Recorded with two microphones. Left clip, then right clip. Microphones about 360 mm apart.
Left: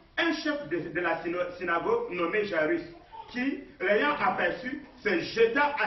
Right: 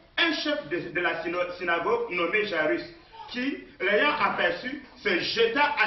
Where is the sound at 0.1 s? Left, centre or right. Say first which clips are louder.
Right 3 dB; centre.